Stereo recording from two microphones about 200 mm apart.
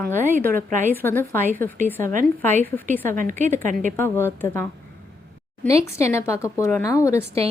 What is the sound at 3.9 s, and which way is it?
Speech, 10° left (ahead or behind).